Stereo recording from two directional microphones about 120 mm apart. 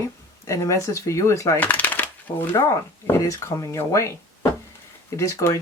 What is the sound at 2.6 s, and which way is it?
Speech, 35° left (ahead or behind).